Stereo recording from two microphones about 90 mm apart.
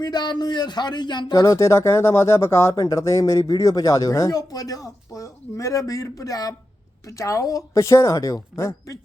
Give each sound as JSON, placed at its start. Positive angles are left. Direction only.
{"t": 0.0, "sound": "speech", "side_deg": 50}
{"t": 1.4, "sound": "speech", "side_deg": 35}